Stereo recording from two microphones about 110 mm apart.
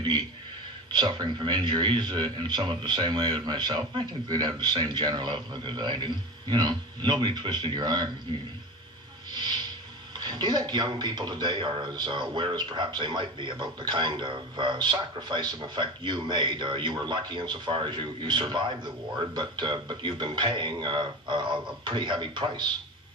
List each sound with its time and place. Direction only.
0.9 s speech: 45° right (ahead or behind)
9.3 s speech: 45° right (ahead or behind)